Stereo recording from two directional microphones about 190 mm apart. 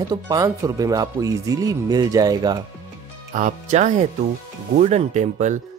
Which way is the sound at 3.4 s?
40° right (ahead or behind).